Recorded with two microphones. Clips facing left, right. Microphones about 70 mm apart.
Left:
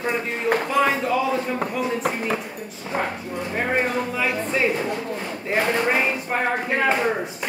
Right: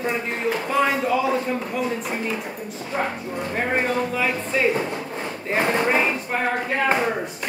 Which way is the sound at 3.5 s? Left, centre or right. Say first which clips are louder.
Even; centre.